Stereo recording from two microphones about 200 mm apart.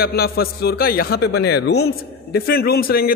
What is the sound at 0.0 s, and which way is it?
A man's voice, 50° left (ahead or behind).